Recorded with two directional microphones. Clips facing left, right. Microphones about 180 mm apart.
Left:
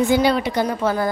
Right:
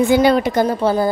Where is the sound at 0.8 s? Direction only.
25° right (ahead or behind).